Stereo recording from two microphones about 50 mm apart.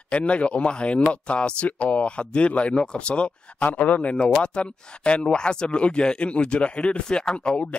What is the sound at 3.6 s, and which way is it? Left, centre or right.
Speech, left.